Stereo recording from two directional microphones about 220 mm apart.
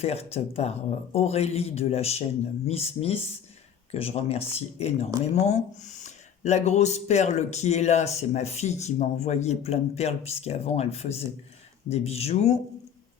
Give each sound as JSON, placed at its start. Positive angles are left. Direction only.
{"t": 0.0, "sound": "speech", "side_deg": 30}